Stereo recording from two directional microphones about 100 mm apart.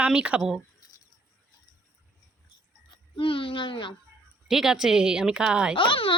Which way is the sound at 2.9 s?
60° left (ahead or behind).